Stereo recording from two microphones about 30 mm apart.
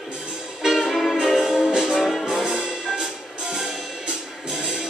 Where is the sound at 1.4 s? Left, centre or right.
Centre.